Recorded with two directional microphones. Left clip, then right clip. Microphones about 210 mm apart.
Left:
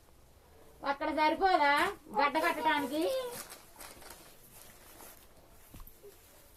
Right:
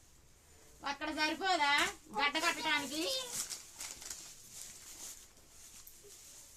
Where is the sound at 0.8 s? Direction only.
25° right (ahead or behind).